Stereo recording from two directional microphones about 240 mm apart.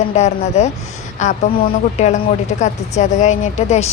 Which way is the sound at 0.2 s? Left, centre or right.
Left.